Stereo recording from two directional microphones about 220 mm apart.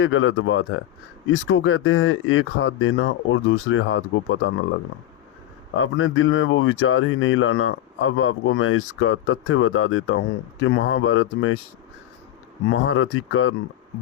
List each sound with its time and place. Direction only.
0.0 s speech: 65° left (ahead or behind)
5.7 s speech: 65° left (ahead or behind)
12.7 s speech: 65° left (ahead or behind)